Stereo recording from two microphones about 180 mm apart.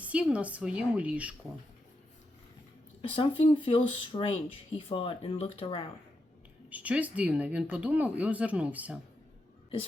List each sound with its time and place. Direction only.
0.0 s speech: 5° right (ahead or behind)
3.0 s speech: 30° left (ahead or behind)
6.7 s speech: 10° right (ahead or behind)